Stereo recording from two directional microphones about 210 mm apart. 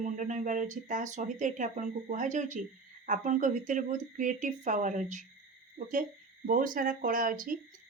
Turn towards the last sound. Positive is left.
turn(degrees=-40)  # may be behind; listen again after turning